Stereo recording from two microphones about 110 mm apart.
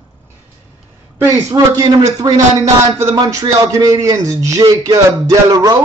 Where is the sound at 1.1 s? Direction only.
25° right (ahead or behind).